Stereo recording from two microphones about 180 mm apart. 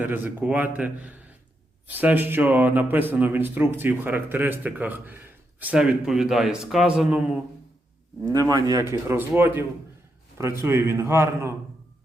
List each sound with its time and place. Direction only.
0.0 s speech: 10° right (ahead or behind)
8.3 s speech: 20° right (ahead or behind)